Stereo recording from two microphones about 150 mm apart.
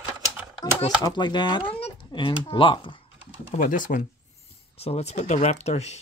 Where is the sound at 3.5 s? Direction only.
60° left (ahead or behind).